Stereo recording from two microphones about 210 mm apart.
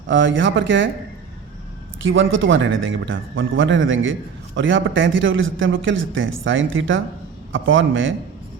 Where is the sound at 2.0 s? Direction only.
65° right (ahead or behind).